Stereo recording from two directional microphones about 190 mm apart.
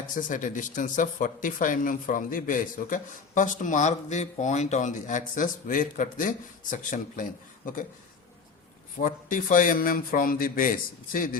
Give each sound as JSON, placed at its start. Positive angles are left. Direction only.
{"t": 0.2, "sound": "speech", "side_deg": 45}
{"t": 9.0, "sound": "speech", "side_deg": 45}